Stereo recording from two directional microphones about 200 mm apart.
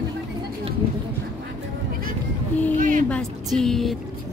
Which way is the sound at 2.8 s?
40° right (ahead or behind).